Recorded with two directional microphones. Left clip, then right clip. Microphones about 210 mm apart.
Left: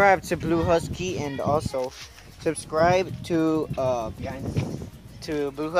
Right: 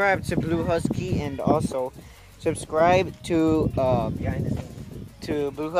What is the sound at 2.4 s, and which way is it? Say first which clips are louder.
Speech: right 1 dB; 15° right (ahead or behind).